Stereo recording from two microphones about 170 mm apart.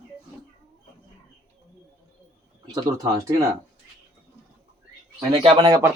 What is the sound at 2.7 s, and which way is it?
Speech, 20° right (ahead or behind).